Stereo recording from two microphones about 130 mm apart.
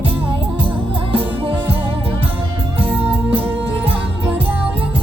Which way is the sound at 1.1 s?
45° right (ahead or behind).